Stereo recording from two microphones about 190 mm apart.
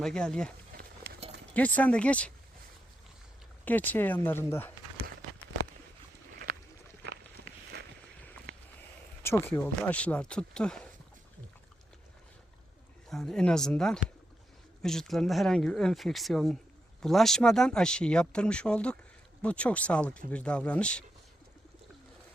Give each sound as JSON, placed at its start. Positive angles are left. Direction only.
{"t": 0.0, "sound": "speech", "side_deg": 5}
{"t": 0.7, "sound": "a sound", "side_deg": -55}
{"t": 1.5, "sound": "speech", "side_deg": 10}
{"t": 3.7, "sound": "speech", "side_deg": 10}
{"t": 6.3, "sound": "a sound", "side_deg": -45}
{"t": 7.4, "sound": "walk", "side_deg": -50}
{"t": 7.7, "sound": "boat", "side_deg": -60}
{"t": 9.4, "sound": "speech", "side_deg": 10}
{"t": 13.1, "sound": "speech", "side_deg": 0}